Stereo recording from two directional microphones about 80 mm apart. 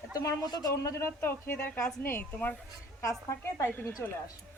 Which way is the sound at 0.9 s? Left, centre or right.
Left.